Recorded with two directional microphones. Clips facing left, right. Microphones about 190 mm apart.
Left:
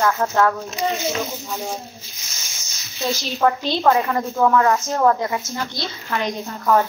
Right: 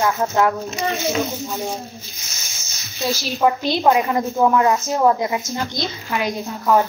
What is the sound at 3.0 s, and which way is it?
A woman's voice, 5° right (ahead or behind).